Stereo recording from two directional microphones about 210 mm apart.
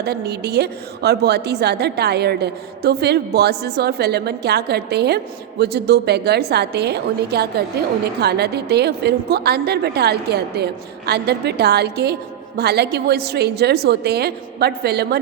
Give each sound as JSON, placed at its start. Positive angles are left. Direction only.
{"t": 0.0, "sound": "a woman's voice", "side_deg": -50}